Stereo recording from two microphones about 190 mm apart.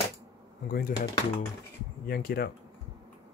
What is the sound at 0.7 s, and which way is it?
Speech, 45° left (ahead or behind).